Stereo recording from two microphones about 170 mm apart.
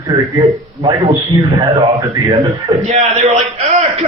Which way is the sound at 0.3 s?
25° right (ahead or behind).